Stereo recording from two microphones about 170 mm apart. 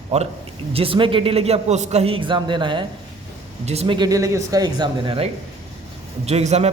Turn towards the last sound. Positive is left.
turn(degrees=-40)  # may be behind; listen again after turning